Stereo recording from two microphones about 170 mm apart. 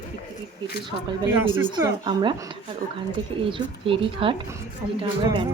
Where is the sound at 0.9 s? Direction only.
25° right (ahead or behind).